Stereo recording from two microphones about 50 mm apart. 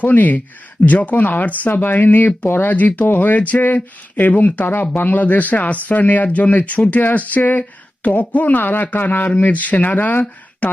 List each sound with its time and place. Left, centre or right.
0.0 s a man's voice: left